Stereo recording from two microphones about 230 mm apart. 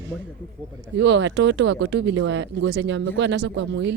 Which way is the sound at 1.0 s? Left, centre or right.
Right.